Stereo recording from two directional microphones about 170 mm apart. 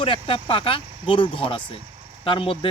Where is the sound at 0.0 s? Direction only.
30° left (ahead or behind).